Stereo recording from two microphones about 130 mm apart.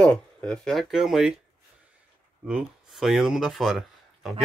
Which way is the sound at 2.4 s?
5° right (ahead or behind).